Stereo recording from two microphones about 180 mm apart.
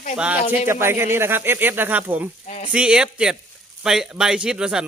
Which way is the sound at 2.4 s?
40° left (ahead or behind).